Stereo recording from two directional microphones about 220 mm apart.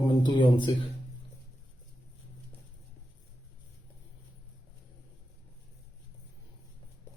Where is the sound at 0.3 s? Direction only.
20° left (ahead or behind).